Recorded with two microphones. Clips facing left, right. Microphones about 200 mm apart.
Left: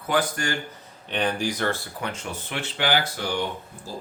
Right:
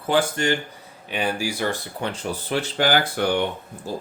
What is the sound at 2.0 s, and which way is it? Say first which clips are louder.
Speech: right 4 dB; 35° right (ahead or behind).